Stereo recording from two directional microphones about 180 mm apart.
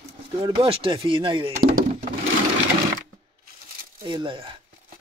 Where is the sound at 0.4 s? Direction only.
30° right (ahead or behind).